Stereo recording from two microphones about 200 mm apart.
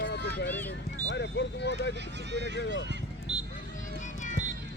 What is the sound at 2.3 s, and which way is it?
Speech, 60° right (ahead or behind).